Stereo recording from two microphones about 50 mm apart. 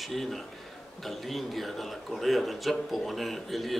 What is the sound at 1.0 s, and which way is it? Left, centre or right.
A man's voice, centre.